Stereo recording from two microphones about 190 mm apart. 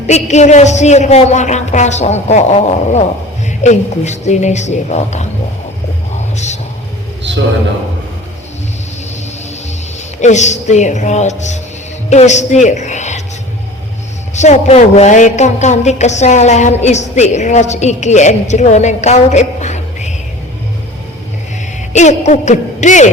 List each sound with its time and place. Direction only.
0.1 s a woman's voice: 35° left (ahead or behind)
6.3 s music: 35° left (ahead or behind)
10.2 s a woman's voice: 40° left (ahead or behind)
14.3 s a woman's voice: 35° left (ahead or behind)
21.9 s a woman's voice: 40° left (ahead or behind)